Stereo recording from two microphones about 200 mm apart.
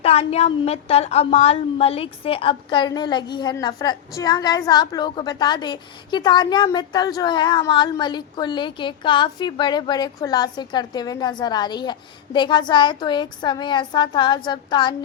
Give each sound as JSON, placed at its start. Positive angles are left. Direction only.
{"t": 0.0, "sound": "a woman's voice", "side_deg": 30}